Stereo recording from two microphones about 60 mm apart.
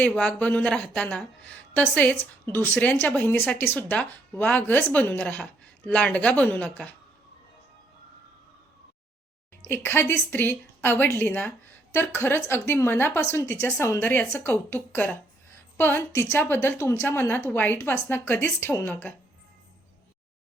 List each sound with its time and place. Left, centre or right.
0.3 s a woman's voice: left
5.6 s a woman's voice: left
9.7 s a woman's voice: left
14.0 s a woman's voice: left